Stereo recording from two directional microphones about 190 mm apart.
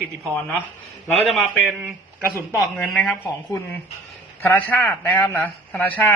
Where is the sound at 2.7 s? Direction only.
5° left (ahead or behind).